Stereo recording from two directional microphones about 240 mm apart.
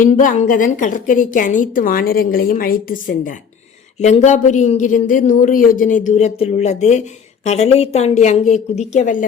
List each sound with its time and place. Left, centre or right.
0.0 s a woman's voice: left